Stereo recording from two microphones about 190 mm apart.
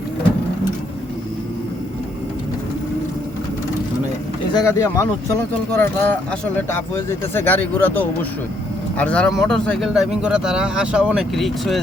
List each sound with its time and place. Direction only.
4.5 s speech: 15° left (ahead or behind)